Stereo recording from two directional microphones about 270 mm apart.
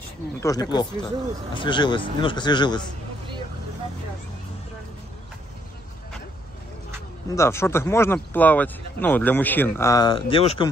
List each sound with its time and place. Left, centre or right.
0.4 s speech: centre
7.3 s speech: centre